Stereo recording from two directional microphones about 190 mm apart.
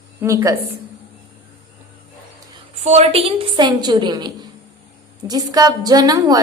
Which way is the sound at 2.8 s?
35° right (ahead or behind).